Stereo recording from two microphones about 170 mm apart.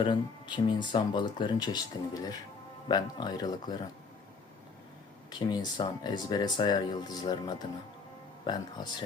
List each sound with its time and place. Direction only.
0.0 s speech: 25° left (ahead or behind)
5.3 s speech: 25° left (ahead or behind)